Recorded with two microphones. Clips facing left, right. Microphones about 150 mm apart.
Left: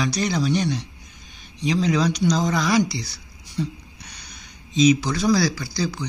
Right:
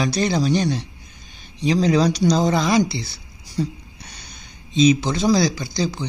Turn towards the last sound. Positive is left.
turn(degrees=-25)  # may be behind; listen again after turning